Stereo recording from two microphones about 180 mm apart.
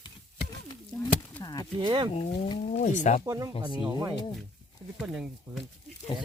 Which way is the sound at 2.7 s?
45° left (ahead or behind).